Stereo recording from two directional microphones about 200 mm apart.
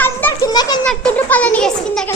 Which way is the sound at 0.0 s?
10° left (ahead or behind).